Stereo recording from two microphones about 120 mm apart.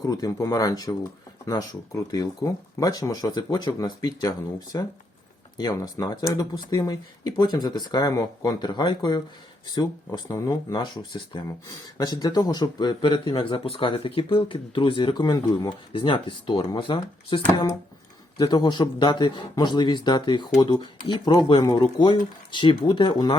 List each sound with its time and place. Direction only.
0.0 s speech: 30° left (ahead or behind)
15.9 s speech: 45° left (ahead or behind)